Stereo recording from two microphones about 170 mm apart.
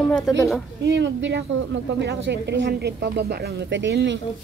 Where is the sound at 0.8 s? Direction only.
90° right.